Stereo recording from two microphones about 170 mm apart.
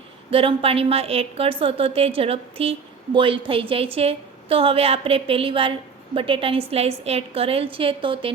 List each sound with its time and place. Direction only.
0.3 s a woman's voice: 35° right (ahead or behind)